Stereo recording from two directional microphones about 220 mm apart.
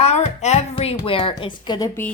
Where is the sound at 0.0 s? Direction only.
30° left (ahead or behind).